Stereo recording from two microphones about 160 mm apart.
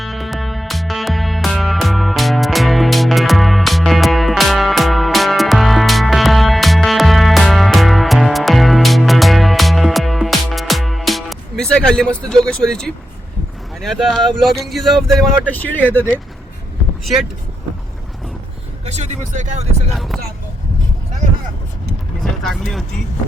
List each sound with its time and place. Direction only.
0.0 s music: centre (ahead or behind)
13.8 s speech: centre (ahead or behind)
15.4 s speech: 10° left (ahead or behind)
18.9 s speech: 45° right (ahead or behind)
19.9 s speech: centre (ahead or behind)
22.2 s speech: centre (ahead or behind)